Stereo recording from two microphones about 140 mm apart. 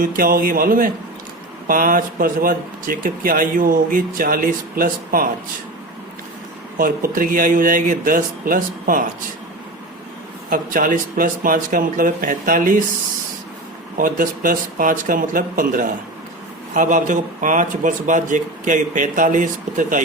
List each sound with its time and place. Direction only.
0.0 s speech: 85° right
6.7 s a man's voice: 80° right
10.5 s a man's voice: 75° right (ahead or behind)
14.0 s a man's voice: 75° right (ahead or behind)